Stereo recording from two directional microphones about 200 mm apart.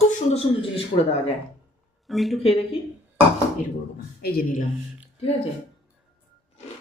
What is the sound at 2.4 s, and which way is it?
Speech, 30° left (ahead or behind).